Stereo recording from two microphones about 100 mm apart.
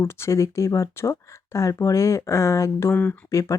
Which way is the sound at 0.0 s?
30° left (ahead or behind).